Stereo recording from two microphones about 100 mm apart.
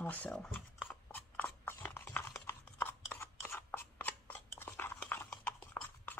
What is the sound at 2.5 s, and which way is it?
Scissors, 25° left (ahead or behind).